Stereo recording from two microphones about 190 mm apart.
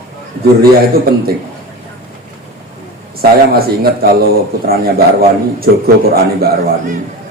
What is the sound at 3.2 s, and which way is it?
A man's voice, 55° right (ahead or behind).